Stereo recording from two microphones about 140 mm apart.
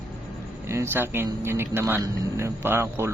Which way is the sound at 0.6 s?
15° right (ahead or behind).